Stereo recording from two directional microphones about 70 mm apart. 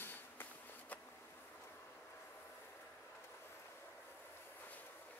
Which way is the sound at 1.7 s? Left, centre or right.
Left.